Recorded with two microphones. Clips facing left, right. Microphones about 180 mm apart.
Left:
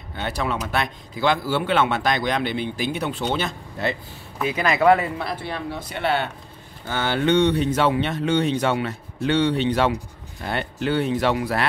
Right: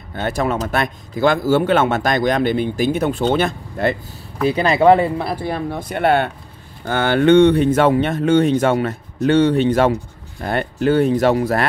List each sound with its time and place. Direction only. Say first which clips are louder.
0.1 s speech: right 6 dB; 45° right (ahead or behind)
4.5 s speech: right 5 dB; 30° right (ahead or behind)